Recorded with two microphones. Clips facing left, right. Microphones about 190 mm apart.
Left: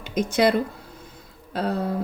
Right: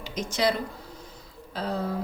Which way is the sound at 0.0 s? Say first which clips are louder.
Left 6 dB; 55° left (ahead or behind).